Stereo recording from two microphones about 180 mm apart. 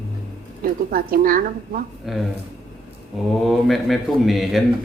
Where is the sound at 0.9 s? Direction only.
55° right (ahead or behind).